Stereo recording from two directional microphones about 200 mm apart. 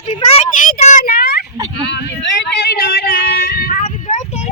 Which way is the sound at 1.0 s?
50° left (ahead or behind).